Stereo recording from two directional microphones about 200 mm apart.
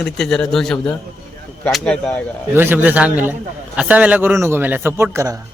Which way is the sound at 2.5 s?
10° right (ahead or behind).